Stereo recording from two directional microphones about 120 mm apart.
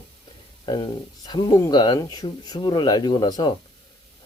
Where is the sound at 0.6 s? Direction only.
35° left (ahead or behind).